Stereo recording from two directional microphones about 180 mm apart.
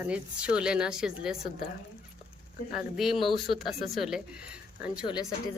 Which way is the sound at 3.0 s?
Centre (ahead or behind).